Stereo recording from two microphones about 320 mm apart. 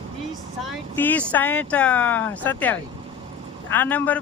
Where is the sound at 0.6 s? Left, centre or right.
Centre.